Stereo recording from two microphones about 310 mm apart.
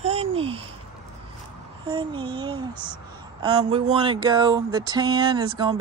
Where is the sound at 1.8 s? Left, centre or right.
Centre.